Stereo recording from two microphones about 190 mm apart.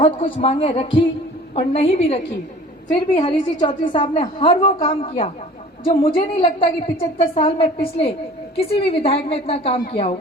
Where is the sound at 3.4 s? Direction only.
25° left (ahead or behind).